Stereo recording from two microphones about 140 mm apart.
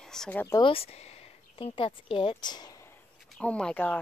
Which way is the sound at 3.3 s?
5° left (ahead or behind).